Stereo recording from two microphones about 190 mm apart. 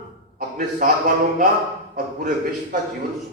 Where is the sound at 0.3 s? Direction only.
45° right (ahead or behind).